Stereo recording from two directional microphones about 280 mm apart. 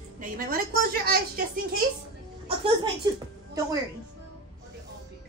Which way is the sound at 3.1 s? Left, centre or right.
Centre.